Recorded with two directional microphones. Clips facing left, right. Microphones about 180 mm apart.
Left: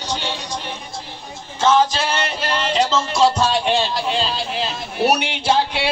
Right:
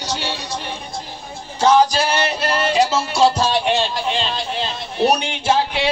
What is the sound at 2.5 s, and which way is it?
Speech, 10° right (ahead or behind).